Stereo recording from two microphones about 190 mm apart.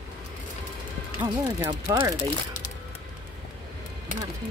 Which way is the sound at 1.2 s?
20° right (ahead or behind).